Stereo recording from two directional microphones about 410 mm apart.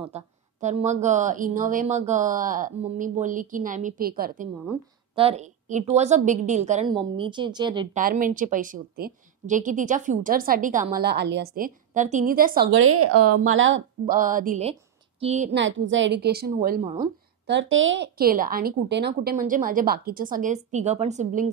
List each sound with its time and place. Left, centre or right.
0.0 s a woman's voice: centre